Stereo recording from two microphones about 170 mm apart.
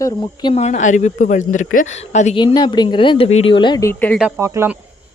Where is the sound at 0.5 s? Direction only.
40° left (ahead or behind).